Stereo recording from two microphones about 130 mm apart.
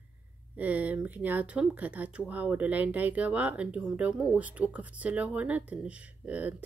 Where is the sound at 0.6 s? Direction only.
10° right (ahead or behind).